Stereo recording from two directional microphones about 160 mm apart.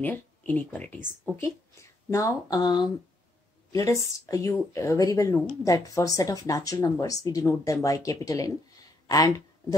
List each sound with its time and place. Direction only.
0.0 s speech: 10° left (ahead or behind)